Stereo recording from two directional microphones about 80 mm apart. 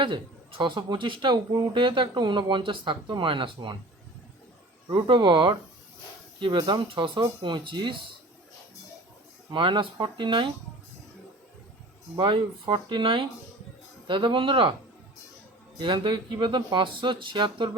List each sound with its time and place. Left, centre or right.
0.0 s a man's voice: right
4.9 s a man's voice: right
7.2 s a man's voice: right
9.5 s a man's voice: right
12.1 s a man's voice: right
15.8 s speech: right
16.7 s a man's voice: right